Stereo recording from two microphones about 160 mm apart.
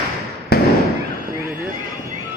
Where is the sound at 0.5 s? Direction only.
75° left (ahead or behind).